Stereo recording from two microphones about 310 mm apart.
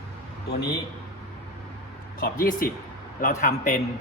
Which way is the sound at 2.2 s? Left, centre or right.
Left.